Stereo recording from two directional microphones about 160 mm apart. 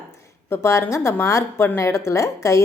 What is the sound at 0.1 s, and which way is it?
A woman's voice, 15° left (ahead or behind).